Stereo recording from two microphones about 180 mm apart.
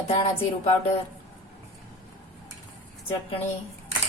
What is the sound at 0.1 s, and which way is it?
Speech, 30° left (ahead or behind).